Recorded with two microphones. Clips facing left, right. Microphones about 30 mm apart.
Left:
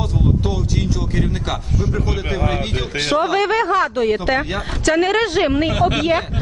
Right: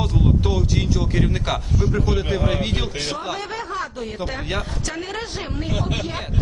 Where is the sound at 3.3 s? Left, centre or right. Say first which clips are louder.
Left 11 dB; left.